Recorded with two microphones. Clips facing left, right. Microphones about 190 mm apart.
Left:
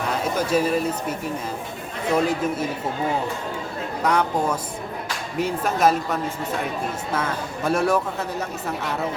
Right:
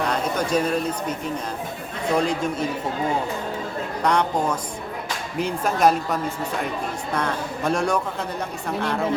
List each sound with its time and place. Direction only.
0.1 s speech: 5° left (ahead or behind)
2.1 s speech: 5° left (ahead or behind)
4.0 s speech: 5° left (ahead or behind)